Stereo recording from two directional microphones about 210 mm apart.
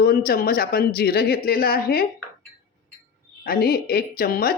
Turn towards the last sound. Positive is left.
turn(degrees=45)  # may be behind; listen again after turning